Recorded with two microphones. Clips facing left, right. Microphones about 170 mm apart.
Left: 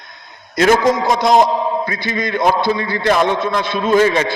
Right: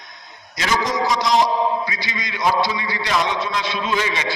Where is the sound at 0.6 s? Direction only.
55° left (ahead or behind).